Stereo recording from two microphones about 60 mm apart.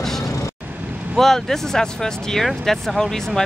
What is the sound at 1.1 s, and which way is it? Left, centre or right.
Speech, centre.